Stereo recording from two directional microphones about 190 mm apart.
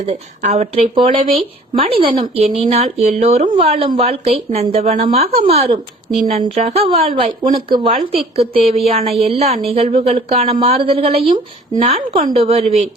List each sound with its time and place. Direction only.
0.0 s speech: 35° right (ahead or behind)
7.1 s speech: 45° right (ahead or behind)
7.5 s speech: 30° right (ahead or behind)